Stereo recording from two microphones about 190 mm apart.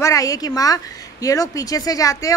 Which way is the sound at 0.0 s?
15° left (ahead or behind).